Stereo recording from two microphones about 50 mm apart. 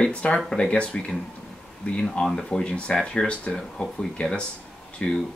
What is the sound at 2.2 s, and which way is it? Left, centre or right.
Speech, centre.